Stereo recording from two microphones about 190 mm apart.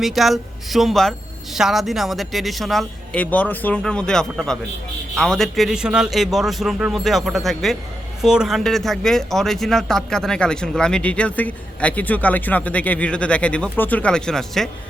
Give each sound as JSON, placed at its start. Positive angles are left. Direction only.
{"t": 0.0, "sound": "speech", "side_deg": 0}